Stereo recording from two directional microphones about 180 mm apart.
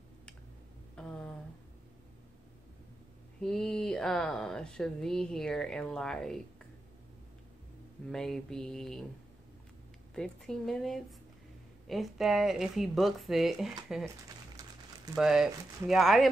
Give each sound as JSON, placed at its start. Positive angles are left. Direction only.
{"t": 0.9, "sound": "a sound", "side_deg": 5}
{"t": 3.3, "sound": "speech", "side_deg": 5}
{"t": 8.1, "sound": "speech", "side_deg": 5}
{"t": 10.1, "sound": "speech", "side_deg": 5}
{"t": 14.6, "sound": "a sound", "side_deg": -20}
{"t": 15.1, "sound": "speech", "side_deg": 0}